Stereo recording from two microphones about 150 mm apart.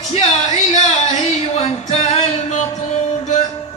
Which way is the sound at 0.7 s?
45° left (ahead or behind).